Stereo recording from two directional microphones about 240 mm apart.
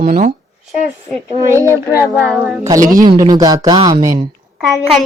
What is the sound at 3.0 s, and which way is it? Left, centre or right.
Speech, centre.